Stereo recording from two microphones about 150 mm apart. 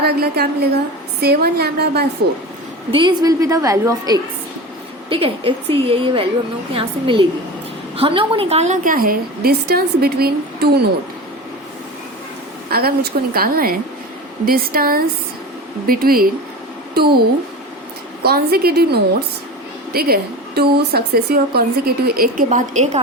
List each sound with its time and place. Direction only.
0.0 s speech: 90° right
2.9 s a woman's voice: 30° right (ahead or behind)
5.0 s a woman's voice: 35° right (ahead or behind); by 10.7 s 90° right
12.7 s a woman's voice: 90° right
18.2 s a woman's voice: 90° right; by 23.0 s 50° right (ahead or behind)